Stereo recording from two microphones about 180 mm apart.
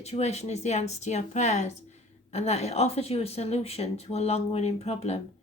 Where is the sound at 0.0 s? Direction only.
35° left (ahead or behind).